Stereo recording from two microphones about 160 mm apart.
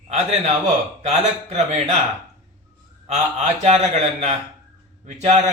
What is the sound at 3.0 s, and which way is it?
A man's voice, 40° right (ahead or behind).